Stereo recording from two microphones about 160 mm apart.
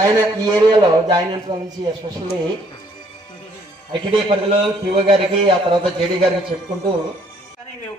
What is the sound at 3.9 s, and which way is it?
A man's voice, 30° right (ahead or behind).